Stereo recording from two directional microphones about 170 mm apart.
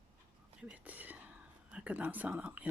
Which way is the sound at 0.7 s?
10° right (ahead or behind).